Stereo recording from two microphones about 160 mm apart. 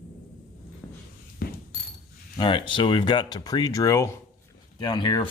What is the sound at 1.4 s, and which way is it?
Mechanisms, 70° left (ahead or behind).